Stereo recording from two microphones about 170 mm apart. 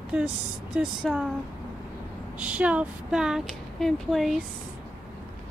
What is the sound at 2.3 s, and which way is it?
Speech, 10° right (ahead or behind).